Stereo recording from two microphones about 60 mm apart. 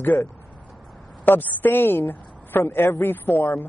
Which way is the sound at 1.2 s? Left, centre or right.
Left.